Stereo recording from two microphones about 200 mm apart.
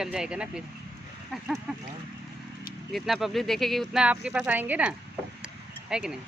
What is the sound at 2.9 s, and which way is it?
Speech, centre (ahead or behind).